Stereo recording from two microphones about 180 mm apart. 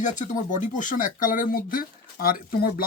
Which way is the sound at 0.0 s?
45° left (ahead or behind).